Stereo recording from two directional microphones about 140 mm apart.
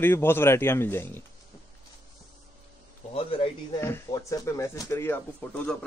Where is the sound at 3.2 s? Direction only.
40° left (ahead or behind).